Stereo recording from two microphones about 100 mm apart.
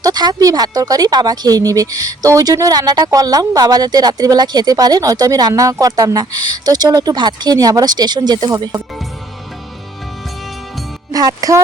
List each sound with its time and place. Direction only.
0.0 s speech: 40° right (ahead or behind)
11.1 s speech: 35° right (ahead or behind)